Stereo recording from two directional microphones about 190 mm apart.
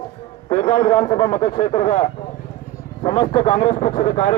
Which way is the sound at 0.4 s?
30° left (ahead or behind).